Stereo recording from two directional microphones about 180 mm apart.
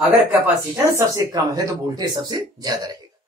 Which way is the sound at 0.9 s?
20° right (ahead or behind).